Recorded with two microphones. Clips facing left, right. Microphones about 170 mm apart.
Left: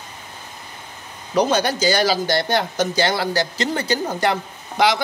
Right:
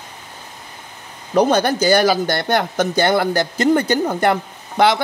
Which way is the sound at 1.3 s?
55° right (ahead or behind).